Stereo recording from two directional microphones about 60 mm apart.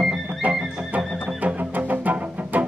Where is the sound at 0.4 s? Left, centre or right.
Right.